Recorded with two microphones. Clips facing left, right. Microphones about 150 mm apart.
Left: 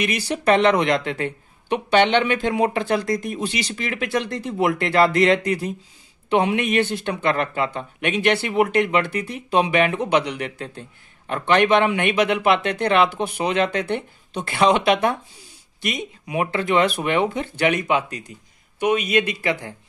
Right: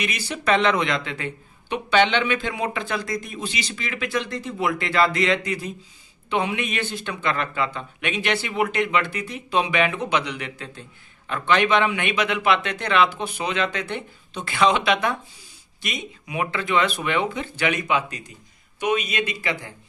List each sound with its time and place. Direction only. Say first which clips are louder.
0.5 s a man's voice: left 4 dB; 55° left (ahead or behind)